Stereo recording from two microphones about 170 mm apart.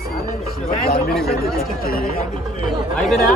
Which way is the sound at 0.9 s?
65° left (ahead or behind).